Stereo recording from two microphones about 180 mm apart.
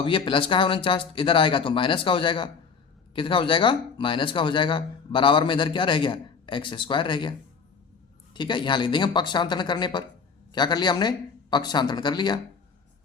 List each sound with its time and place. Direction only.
0.0 s speech: 30° left (ahead or behind)